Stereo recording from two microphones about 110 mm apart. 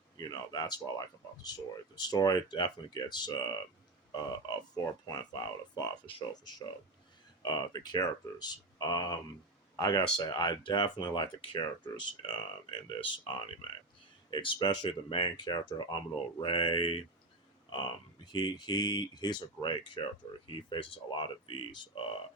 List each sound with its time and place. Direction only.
0.2 s speech: 35° left (ahead or behind)